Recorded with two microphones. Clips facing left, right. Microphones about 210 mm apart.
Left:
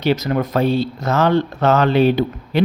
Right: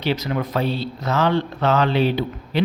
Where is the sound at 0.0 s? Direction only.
45° left (ahead or behind).